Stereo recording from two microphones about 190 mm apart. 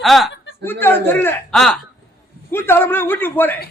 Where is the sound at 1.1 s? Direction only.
10° left (ahead or behind).